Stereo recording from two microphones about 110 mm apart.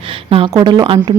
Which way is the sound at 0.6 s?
45° right (ahead or behind).